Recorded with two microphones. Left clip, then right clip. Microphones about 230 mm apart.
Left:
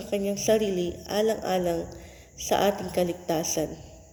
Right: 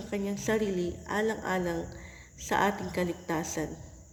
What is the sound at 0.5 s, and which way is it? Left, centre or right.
Speech, right.